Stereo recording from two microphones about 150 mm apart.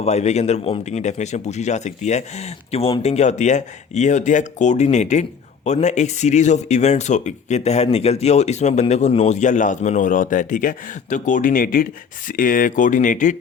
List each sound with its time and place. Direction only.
0.0 s speech: 45° left (ahead or behind)